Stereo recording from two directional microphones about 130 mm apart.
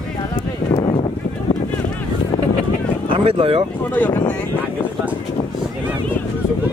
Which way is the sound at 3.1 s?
45° right (ahead or behind).